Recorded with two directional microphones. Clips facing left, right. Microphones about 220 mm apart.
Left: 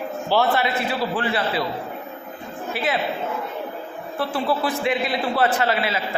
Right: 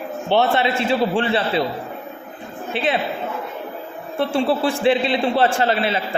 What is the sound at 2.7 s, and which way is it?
Speech, 30° right (ahead or behind).